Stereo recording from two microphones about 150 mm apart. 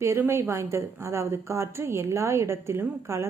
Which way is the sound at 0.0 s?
15° right (ahead or behind).